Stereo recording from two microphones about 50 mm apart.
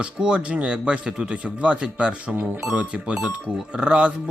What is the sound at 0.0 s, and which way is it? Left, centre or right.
Speech, centre.